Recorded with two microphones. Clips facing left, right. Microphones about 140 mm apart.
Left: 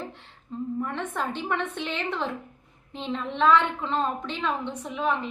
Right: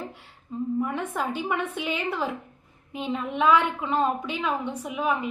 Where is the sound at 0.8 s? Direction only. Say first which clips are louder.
Right 1 dB; 10° right (ahead or behind).